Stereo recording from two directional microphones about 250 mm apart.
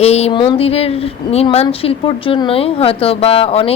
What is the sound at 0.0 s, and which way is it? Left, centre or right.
Speech, left.